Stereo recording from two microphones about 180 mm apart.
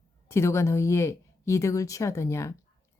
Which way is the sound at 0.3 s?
15° left (ahead or behind).